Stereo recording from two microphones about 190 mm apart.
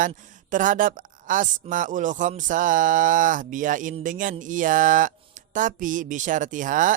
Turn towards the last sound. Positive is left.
turn(degrees=-45)  # may be behind; listen again after turning